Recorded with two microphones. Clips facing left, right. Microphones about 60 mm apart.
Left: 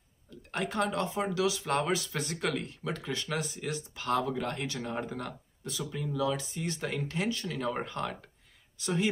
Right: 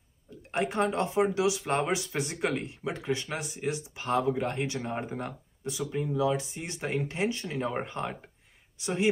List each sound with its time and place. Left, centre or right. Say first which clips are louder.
0.3 s speech: right 4 dB; right